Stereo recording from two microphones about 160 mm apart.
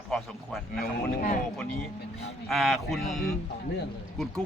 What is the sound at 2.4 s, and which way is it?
A man's voice, centre (ahead or behind).